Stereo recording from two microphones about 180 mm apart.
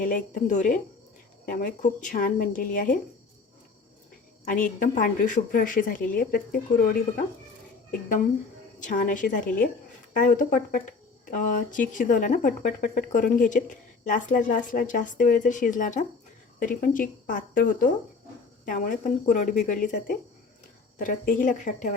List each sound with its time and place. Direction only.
0.0 s speech: 50° left (ahead or behind)
4.4 s speech: 50° left (ahead or behind)